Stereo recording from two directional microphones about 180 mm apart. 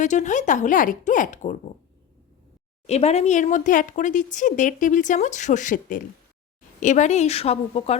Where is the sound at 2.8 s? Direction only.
35° left (ahead or behind).